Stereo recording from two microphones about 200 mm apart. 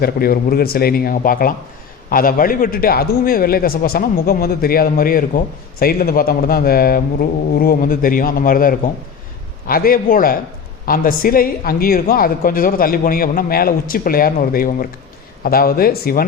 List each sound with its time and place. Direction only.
0.0 s speech: 50° left (ahead or behind)